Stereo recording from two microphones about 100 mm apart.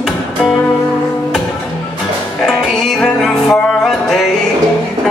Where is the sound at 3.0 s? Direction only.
5° left (ahead or behind).